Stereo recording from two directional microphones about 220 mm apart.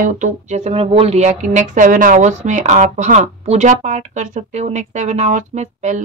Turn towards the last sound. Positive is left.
turn(degrees=-30)  # may be behind; listen again after turning